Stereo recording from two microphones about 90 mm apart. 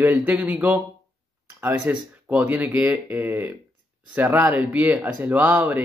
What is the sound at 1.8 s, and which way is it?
Speech, 15° right (ahead or behind).